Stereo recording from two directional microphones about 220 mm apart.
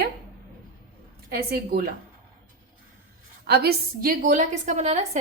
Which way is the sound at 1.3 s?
45° right (ahead or behind).